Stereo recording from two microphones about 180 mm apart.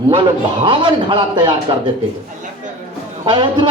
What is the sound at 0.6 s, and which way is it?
Speech, 25° right (ahead or behind).